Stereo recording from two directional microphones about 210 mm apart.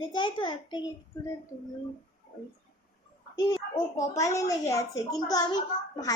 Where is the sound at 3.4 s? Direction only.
20° left (ahead or behind).